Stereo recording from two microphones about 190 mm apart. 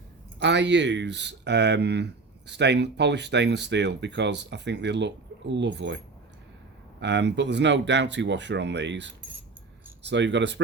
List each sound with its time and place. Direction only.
0.3 s speech: 65° right (ahead or behind)
7.0 s speech: 65° right (ahead or behind)